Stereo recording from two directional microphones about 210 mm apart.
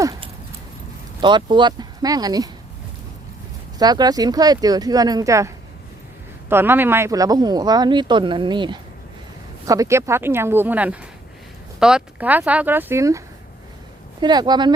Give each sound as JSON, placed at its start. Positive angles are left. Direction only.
{"t": 0.0, "sound": "a sound", "side_deg": -20}
{"t": 1.2, "sound": "speech", "side_deg": -20}
{"t": 3.8, "sound": "speech", "side_deg": -20}
{"t": 6.5, "sound": "speech", "side_deg": -10}